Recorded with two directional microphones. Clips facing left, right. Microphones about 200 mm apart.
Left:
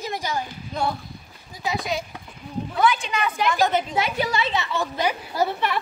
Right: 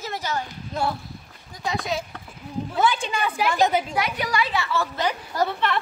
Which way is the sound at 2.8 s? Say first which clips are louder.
Left 1 dB; 30° right (ahead or behind).